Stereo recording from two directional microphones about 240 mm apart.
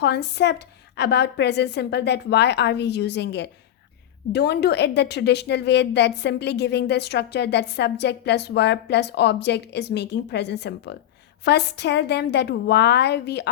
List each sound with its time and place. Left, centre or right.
0.0 s a woman's voice: left